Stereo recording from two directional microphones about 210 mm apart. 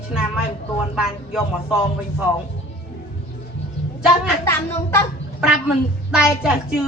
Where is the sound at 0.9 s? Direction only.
5° right (ahead or behind).